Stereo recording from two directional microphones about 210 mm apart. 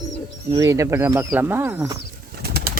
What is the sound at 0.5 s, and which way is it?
Speech, 15° right (ahead or behind).